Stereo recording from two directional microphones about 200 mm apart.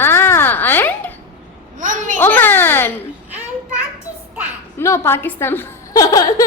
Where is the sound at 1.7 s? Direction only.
40° right (ahead or behind).